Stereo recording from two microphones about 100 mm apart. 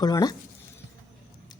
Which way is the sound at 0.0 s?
40° left (ahead or behind).